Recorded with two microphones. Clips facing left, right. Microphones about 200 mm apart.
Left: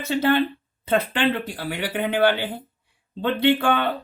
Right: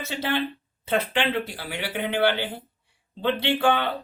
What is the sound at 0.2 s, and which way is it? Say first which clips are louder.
Speech: left 7 dB; 50° left (ahead or behind).